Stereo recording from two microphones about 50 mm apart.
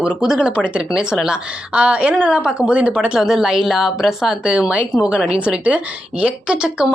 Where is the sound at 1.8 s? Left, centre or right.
Right.